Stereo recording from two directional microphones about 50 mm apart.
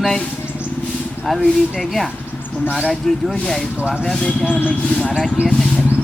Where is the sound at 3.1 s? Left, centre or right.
Centre.